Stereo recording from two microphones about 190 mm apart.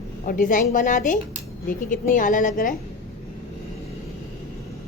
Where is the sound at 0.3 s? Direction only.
45° left (ahead or behind).